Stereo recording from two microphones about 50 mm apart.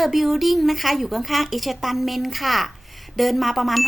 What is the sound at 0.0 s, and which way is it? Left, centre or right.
A woman's voice, centre.